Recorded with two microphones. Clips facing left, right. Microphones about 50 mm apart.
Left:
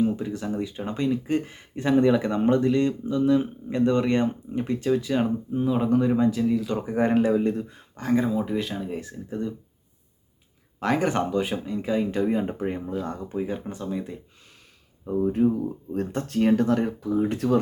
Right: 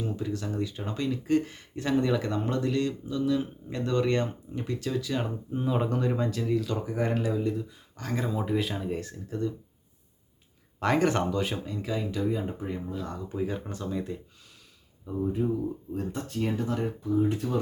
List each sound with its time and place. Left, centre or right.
0.0 s speech: left
5.5 s speech: centre
6.0 s speech: centre
6.7 s speech: left
7.3 s speech: left
7.9 s speech: left
8.2 s speech: centre
10.8 s speech: centre
11.3 s speech: centre
12.2 s speech: left
12.9 s speech: left
13.3 s speech: centre
15.3 s speech: left
16.0 s speech: left